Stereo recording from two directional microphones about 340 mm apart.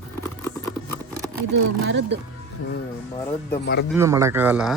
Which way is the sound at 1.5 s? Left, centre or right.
Right.